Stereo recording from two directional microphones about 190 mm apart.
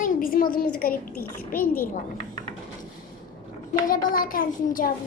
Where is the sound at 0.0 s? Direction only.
50° left (ahead or behind).